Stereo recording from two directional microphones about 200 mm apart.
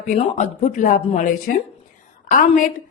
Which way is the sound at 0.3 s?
40° left (ahead or behind).